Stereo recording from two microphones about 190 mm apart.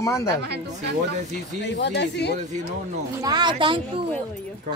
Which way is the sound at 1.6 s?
65° left (ahead or behind).